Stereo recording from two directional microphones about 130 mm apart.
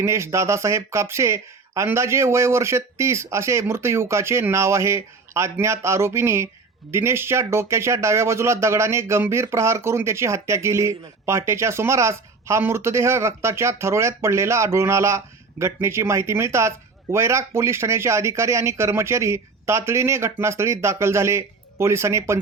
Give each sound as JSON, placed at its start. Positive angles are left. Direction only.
{"t": 0.0, "sound": "speech", "side_deg": -20}